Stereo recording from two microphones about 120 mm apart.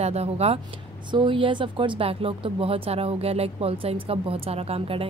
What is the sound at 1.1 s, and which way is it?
Speech, 40° right (ahead or behind).